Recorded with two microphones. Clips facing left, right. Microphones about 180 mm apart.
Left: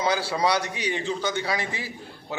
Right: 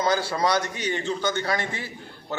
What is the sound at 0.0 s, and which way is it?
A man's voice, 10° left (ahead or behind).